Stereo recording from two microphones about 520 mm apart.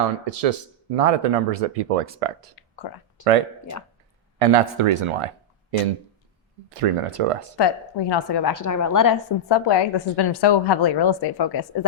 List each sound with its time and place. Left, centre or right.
0.4 s speech: right
2.6 s whispering: left
3.2 s speech: left
4.4 s speech: right
6.7 s speech: right
7.5 s a woman's voice: left